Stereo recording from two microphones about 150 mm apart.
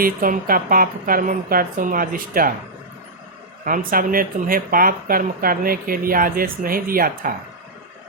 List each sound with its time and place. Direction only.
0.0 s speech: 70° right (ahead or behind)
3.6 s speech: 70° right (ahead or behind)